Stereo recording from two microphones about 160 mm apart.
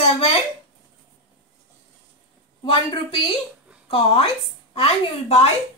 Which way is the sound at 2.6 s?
35° left (ahead or behind).